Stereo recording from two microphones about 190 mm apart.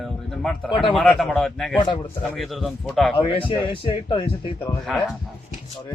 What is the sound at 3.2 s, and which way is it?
Speech, 25° left (ahead or behind).